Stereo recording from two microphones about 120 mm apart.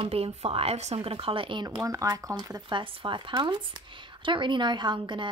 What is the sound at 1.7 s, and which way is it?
Speech, 30° right (ahead or behind).